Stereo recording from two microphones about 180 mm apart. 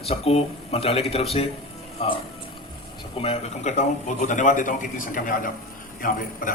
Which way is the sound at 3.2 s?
35° left (ahead or behind).